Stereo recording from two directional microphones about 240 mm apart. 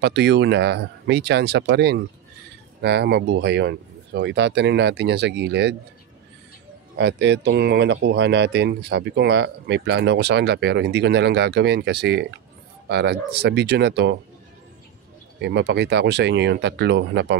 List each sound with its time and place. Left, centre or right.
0.0 s speech: right
7.0 s speech: right
15.4 s speech: right